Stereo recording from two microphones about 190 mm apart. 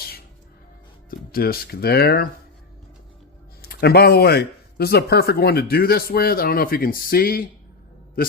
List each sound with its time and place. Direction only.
1.1 s speech: 50° left (ahead or behind)
3.6 s speech: 55° left (ahead or behind)